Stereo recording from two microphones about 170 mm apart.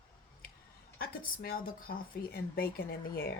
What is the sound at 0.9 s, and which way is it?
Speech, 60° left (ahead or behind).